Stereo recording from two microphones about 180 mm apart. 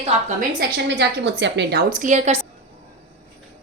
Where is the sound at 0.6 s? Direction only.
70° right (ahead or behind); by 2.4 s 40° right (ahead or behind).